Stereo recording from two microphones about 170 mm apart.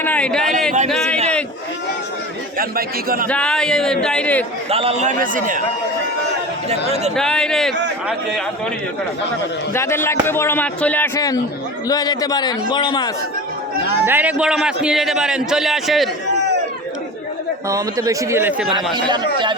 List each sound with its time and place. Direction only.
0.0 s a man's voice: 10° left (ahead or behind)
0.9 s a sound: centre (ahead or behind)
2.6 s speech: 60° right (ahead or behind)
3.2 s a man's voice: 5° left (ahead or behind)
4.7 s a man's voice: 35° right (ahead or behind); by 5.6 s 55° right (ahead or behind)
7.2 s a man's voice: 5° left (ahead or behind)
9.7 s a man's voice: 15° left (ahead or behind)
14.0 s a man's voice: 10° right (ahead or behind)
17.7 s a man's voice: 20° right (ahead or behind)
19.0 s a man's voice: 25° right (ahead or behind)